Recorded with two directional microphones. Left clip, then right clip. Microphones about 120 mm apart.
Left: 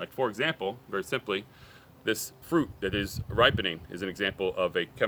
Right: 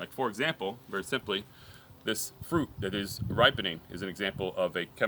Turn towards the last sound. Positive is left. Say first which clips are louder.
# left 2 dB
turn(degrees=30)  # may be behind; listen again after turning